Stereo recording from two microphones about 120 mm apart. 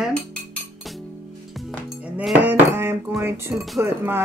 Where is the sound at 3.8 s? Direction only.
20° right (ahead or behind).